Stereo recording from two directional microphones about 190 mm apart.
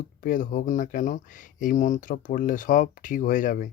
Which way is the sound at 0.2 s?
45° left (ahead or behind).